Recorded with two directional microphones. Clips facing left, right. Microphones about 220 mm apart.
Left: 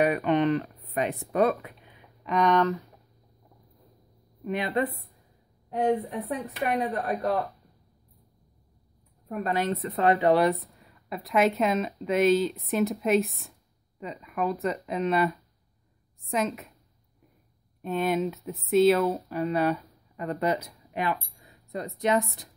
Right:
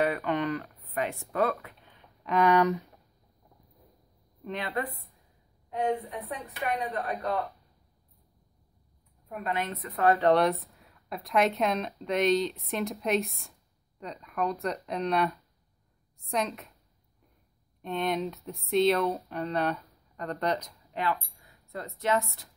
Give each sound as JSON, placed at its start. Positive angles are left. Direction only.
{"t": 0.0, "sound": "speech", "side_deg": 20}
{"t": 2.2, "sound": "speech", "side_deg": -5}
{"t": 4.5, "sound": "a woman's voice", "side_deg": 10}
{"t": 4.7, "sound": "a woman's voice", "side_deg": 25}
{"t": 5.7, "sound": "a woman's voice", "side_deg": 35}
{"t": 9.3, "sound": "a woman's voice", "side_deg": 40}
{"t": 10.2, "sound": "speech", "side_deg": 0}
{"t": 17.8, "sound": "speech", "side_deg": 5}